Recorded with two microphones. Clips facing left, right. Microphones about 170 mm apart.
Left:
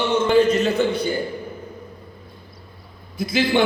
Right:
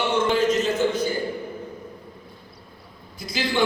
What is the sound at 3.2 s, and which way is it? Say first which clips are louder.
Speech: left 7 dB; 60° left (ahead or behind).